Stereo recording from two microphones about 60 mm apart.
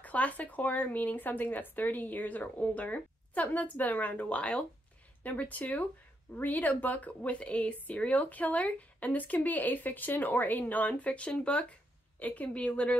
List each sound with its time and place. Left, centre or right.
0.0 s speech: left